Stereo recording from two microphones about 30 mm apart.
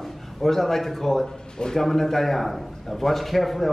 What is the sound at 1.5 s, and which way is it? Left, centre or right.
Speech, left.